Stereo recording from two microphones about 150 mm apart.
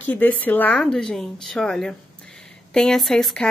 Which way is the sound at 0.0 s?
10° left (ahead or behind).